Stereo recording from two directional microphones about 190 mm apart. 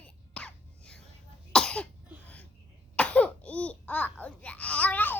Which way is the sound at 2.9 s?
5° left (ahead or behind).